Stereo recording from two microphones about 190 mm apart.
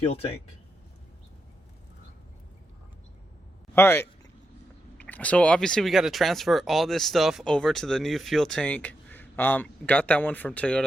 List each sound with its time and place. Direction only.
3.8 s speech: 10° left (ahead or behind)